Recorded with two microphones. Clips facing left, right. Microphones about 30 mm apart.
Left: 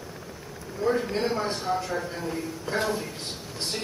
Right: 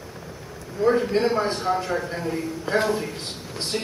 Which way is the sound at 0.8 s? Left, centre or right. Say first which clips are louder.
Right 6 dB; centre.